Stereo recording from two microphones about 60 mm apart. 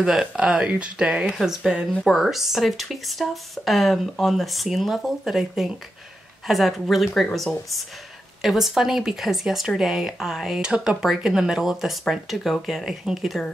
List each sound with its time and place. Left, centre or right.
0.0 s speech: centre
1.3 s speech: centre